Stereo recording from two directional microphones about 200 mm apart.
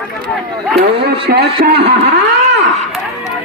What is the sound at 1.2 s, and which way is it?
Speech, 50° right (ahead or behind).